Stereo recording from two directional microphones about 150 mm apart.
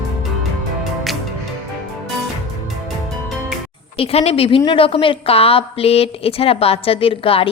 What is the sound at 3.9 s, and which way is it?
A woman's voice, 40° left (ahead or behind).